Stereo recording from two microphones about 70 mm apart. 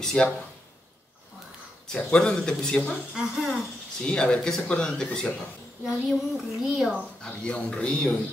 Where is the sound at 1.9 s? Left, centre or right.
Centre.